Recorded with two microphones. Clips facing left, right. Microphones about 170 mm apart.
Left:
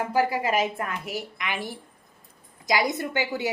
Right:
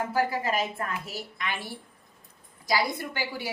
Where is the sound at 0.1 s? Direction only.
15° left (ahead or behind).